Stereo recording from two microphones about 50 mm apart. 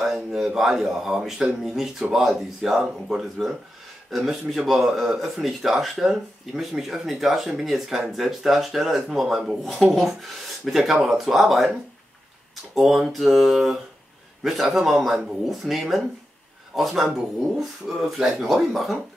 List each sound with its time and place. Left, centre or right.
0.6 s speech: centre
12.7 s speech: centre